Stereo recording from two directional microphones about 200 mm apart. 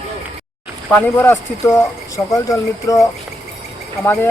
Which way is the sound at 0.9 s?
10° left (ahead or behind).